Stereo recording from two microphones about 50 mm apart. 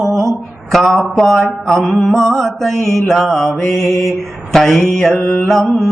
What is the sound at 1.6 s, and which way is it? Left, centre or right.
Mantra, centre.